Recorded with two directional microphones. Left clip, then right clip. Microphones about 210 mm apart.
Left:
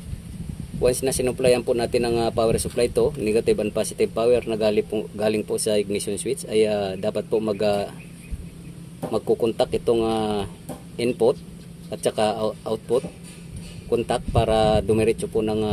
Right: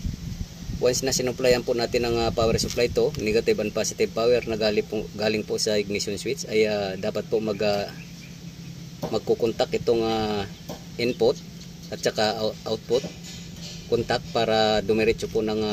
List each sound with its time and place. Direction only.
0.8 s speech: 10° left (ahead or behind)
9.1 s speech: 10° left (ahead or behind)